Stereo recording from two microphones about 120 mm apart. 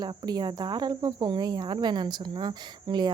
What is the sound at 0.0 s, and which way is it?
Speech, 35° right (ahead or behind).